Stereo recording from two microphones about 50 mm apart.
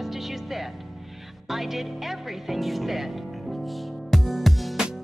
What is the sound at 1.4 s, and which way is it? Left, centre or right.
Music, centre.